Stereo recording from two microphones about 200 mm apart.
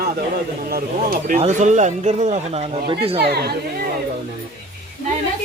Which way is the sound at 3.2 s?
55° right (ahead or behind).